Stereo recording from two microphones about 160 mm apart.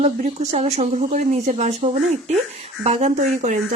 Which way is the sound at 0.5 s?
45° right (ahead or behind).